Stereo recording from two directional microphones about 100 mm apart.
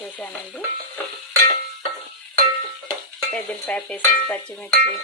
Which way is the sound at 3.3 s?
15° left (ahead or behind).